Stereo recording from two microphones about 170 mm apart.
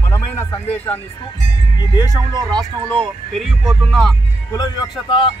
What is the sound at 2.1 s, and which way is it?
Speech, 25° right (ahead or behind).